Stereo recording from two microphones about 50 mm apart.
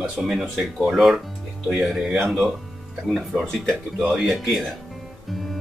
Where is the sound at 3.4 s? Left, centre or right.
Centre.